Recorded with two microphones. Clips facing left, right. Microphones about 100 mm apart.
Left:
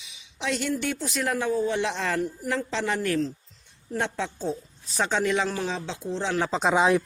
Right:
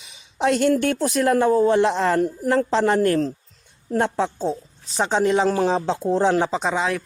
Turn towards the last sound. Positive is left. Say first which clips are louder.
# left 3 dB
turn(degrees=20)  # may be behind; listen again after turning